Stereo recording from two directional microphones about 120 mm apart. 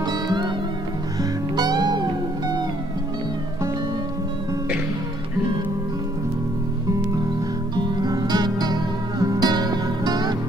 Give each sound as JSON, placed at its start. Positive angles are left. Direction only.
{"t": 0.0, "sound": "music", "side_deg": -35}
{"t": 1.6, "sound": "music", "side_deg": -35}
{"t": 7.7, "sound": "music", "side_deg": -35}